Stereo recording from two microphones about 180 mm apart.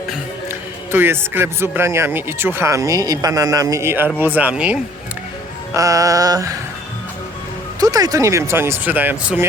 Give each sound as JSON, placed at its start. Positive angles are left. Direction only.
{"t": 0.9, "sound": "speech", "side_deg": -10}
{"t": 5.7, "sound": "music", "side_deg": -20}
{"t": 7.8, "sound": "speech", "side_deg": -20}